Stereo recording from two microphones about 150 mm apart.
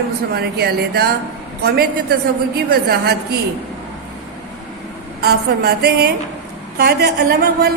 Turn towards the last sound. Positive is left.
turn(degrees=-90)